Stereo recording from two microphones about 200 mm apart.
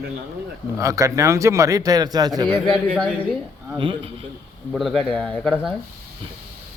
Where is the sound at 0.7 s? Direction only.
15° right (ahead or behind).